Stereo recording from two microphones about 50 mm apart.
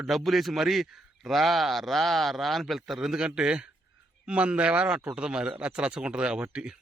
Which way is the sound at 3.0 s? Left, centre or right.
Centre.